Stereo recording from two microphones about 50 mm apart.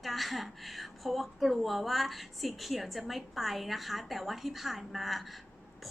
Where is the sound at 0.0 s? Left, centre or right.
Centre.